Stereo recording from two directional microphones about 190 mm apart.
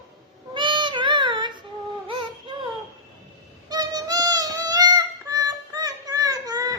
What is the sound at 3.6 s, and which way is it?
Music, 20° right (ahead or behind).